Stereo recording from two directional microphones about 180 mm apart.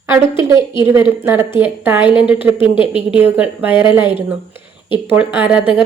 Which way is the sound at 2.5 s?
30° left (ahead or behind).